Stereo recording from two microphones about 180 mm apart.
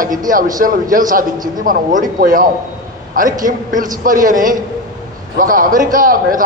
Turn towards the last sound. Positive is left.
turn(degrees=-50)  # may be behind; listen again after turning